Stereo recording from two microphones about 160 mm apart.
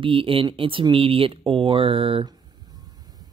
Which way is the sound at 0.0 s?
35° right (ahead or behind).